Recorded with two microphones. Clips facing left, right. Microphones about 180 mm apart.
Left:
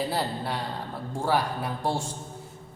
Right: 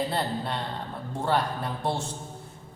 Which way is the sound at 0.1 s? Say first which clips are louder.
Even; 5° left (ahead or behind).